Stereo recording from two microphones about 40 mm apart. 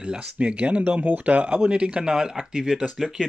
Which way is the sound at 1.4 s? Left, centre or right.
Right.